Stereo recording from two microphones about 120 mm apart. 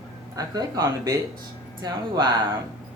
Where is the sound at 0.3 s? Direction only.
30° right (ahead or behind).